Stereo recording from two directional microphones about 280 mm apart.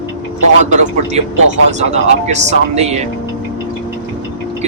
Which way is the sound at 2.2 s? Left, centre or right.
Right.